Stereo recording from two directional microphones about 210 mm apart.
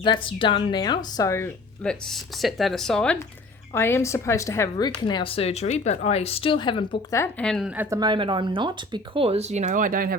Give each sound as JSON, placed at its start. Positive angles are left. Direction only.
{"t": 0.0, "sound": "a woman's voice", "side_deg": 25}
{"t": 7.2, "sound": "speech", "side_deg": 5}
{"t": 7.8, "sound": "speech", "side_deg": -15}